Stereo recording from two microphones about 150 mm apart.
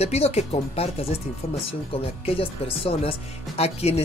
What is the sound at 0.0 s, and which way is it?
Speech, 45° left (ahead or behind).